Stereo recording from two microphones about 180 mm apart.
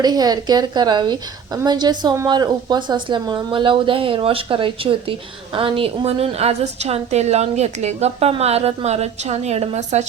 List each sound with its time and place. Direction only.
0.0 s a woman's voice: 20° right (ahead or behind); by 10.1 s 40° right (ahead or behind)